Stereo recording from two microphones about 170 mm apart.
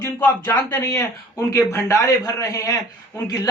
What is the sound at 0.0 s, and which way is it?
Speech, 10° left (ahead or behind).